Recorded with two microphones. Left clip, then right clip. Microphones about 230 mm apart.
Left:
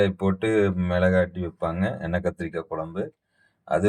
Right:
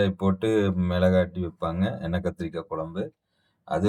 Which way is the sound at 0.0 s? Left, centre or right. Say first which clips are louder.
Left 2 dB; centre.